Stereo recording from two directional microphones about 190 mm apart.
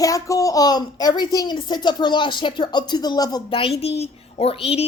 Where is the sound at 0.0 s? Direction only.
15° left (ahead or behind).